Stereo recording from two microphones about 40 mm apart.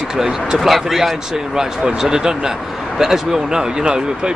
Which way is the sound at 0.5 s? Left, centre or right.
Centre.